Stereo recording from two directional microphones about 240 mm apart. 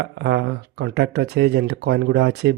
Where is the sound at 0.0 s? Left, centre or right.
Right.